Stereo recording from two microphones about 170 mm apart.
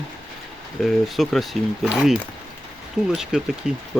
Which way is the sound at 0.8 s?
Centre (ahead or behind).